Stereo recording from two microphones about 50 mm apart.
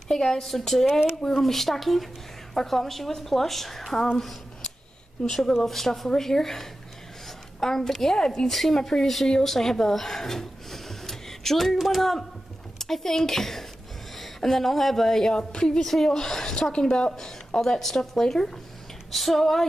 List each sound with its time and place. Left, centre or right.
0.1 s a woman's voice: centre